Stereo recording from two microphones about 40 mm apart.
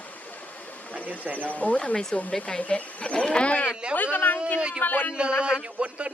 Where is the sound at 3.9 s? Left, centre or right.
Left.